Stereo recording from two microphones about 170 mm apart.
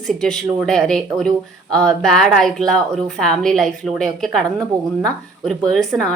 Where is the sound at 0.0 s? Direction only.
5° left (ahead or behind).